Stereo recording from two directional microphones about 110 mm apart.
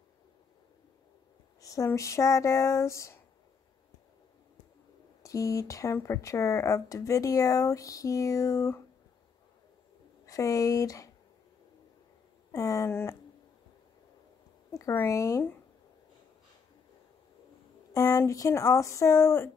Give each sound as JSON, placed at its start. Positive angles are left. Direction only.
{"t": 1.6, "sound": "a sound", "side_deg": 30}
{"t": 1.9, "sound": "speech", "side_deg": 25}
{"t": 5.2, "sound": "speech", "side_deg": 30}
{"t": 10.2, "sound": "speech", "side_deg": 30}
{"t": 12.5, "sound": "speech", "side_deg": 30}
{"t": 14.7, "sound": "speech", "side_deg": 25}
{"t": 17.9, "sound": "speech", "side_deg": 25}